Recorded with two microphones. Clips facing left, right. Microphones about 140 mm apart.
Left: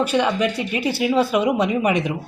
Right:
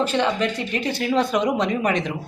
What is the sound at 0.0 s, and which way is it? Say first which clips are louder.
A woman's voice: left 2 dB; 10° left (ahead or behind).